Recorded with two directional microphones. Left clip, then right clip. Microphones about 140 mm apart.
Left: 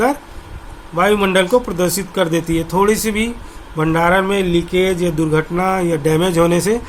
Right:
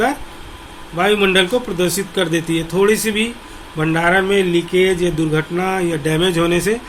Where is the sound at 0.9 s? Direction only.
60° left (ahead or behind).